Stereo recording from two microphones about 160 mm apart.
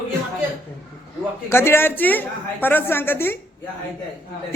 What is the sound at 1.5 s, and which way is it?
A woman's voice, 15° left (ahead or behind).